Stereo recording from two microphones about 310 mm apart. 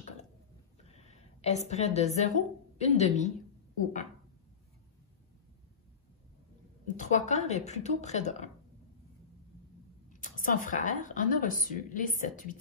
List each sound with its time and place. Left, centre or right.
0.8 s a sound: left
1.7 s speech: left
7.0 s speech: left
10.0 s speech: left